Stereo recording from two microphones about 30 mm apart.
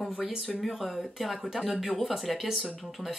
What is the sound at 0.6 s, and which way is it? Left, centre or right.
Speech, centre.